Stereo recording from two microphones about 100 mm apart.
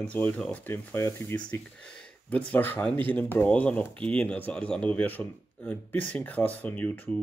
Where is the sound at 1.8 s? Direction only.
10° left (ahead or behind).